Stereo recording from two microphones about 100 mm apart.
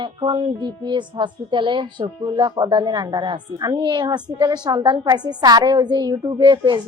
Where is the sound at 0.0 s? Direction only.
60° right (ahead or behind).